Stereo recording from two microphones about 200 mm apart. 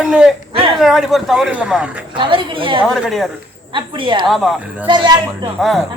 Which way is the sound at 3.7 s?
25° right (ahead or behind).